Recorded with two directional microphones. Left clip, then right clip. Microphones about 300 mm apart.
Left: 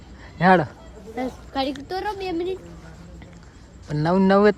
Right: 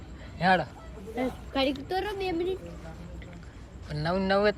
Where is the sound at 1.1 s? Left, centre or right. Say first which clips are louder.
Left 3 dB; centre.